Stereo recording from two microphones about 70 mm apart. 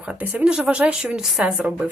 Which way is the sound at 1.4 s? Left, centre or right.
Centre.